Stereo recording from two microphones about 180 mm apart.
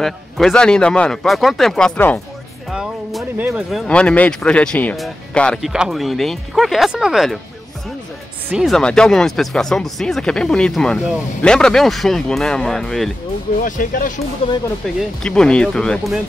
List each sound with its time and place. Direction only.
0.0 s speech: 5° left (ahead or behind)
8.5 s speech: centre (ahead or behind)
13.6 s speech: 50° left (ahead or behind)
15.0 s speech: 5° left (ahead or behind)